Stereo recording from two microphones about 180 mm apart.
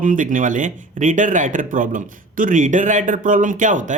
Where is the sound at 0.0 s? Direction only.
45° right (ahead or behind).